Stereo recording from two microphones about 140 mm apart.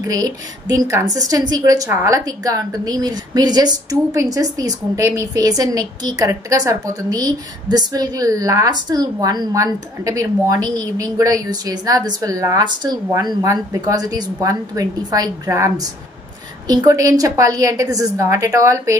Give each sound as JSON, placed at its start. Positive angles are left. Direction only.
{"t": 0.0, "sound": "a woman's voice", "side_deg": -25}